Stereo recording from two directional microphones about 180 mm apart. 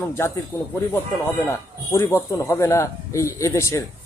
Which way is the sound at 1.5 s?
15° left (ahead or behind).